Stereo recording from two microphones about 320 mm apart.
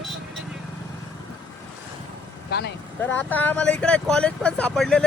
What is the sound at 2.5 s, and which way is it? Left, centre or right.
Speech, left.